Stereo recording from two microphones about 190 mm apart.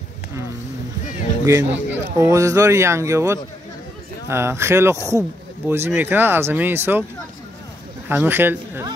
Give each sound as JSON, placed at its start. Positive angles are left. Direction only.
{"t": 1.4, "sound": "speech", "side_deg": -15}
{"t": 1.7, "sound": "speech", "side_deg": -70}
{"t": 2.1, "sound": "speech", "side_deg": -15}
{"t": 8.1, "sound": "speech", "side_deg": -10}